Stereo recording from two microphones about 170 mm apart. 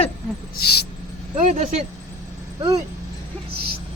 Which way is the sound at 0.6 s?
70° left (ahead or behind).